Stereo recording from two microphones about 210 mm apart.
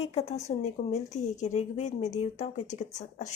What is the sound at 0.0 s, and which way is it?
Speech, 30° left (ahead or behind).